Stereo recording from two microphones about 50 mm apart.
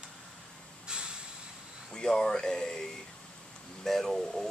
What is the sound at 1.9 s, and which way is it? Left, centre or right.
Speech, centre.